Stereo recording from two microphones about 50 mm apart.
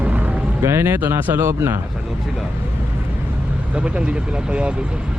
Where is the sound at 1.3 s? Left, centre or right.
Right.